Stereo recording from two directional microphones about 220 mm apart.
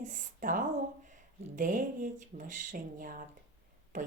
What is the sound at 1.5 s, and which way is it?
A woman's voice, 35° right (ahead or behind).